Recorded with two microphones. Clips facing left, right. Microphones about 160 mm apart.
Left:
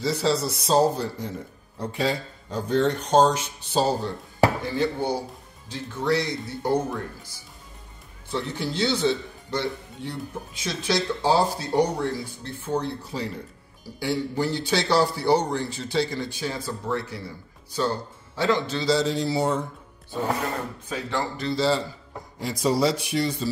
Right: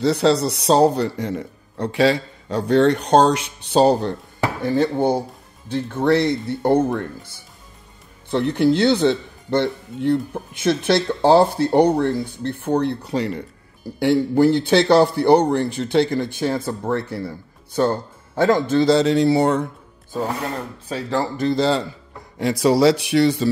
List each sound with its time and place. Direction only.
0.0 s a man's voice: 70° right (ahead or behind)
4.6 s a man's voice: 50° right (ahead or behind)
8.3 s a man's voice: 60° right (ahead or behind)
13.9 s a man's voice: 60° right (ahead or behind)
20.9 s speech: 35° right (ahead or behind)
21.5 s a man's voice: 60° right (ahead or behind)
22.4 s a man's voice: 70° right (ahead or behind)